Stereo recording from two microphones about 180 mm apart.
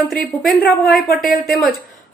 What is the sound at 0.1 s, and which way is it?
A woman's voice, centre (ahead or behind).